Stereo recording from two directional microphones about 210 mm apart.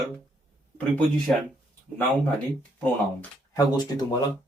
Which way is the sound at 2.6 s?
5° left (ahead or behind).